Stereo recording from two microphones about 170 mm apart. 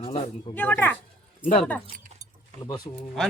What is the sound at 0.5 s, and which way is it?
Speech, 10° left (ahead or behind).